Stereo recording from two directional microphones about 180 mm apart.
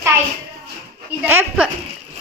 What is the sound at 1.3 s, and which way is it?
Child singing, 10° right (ahead or behind).